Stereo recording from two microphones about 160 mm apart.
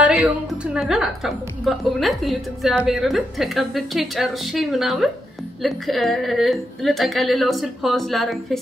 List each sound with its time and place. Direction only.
0.0 s a woman's voice: 5° right (ahead or behind)